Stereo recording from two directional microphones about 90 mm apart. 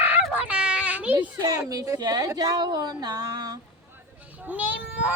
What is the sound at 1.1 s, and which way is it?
A woman's voice, 45° right (ahead or behind).